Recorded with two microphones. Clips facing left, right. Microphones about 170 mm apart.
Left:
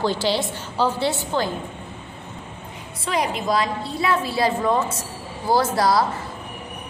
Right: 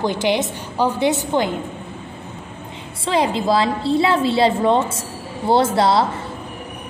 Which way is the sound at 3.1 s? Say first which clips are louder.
Right 5 dB; 30° right (ahead or behind).